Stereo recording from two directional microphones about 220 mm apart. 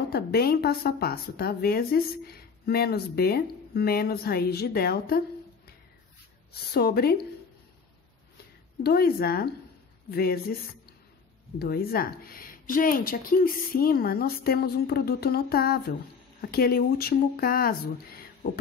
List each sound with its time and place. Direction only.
0.1 s a woman's voice: 45° left (ahead or behind)
6.5 s a woman's voice: 45° left (ahead or behind)
8.8 s a woman's voice: 45° left (ahead or behind)
11.5 s a woman's voice: 45° left (ahead or behind)